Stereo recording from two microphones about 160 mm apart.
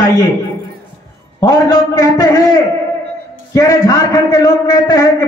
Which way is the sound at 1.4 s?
25° left (ahead or behind).